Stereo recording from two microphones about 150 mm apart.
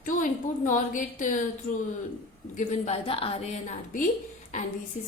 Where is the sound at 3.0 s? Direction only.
40° left (ahead or behind).